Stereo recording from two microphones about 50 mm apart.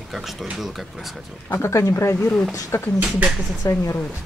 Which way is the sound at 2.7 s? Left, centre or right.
Left.